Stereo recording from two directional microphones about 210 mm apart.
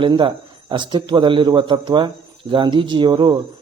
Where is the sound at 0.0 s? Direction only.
25° right (ahead or behind).